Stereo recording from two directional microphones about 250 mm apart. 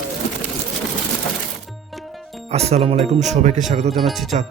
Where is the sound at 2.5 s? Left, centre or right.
Right.